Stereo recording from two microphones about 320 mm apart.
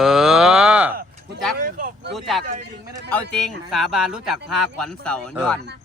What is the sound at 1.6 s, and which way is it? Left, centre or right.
Vehicle, right.